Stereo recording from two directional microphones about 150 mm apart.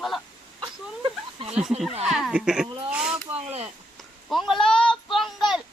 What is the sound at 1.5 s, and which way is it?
Speech, 5° right (ahead or behind).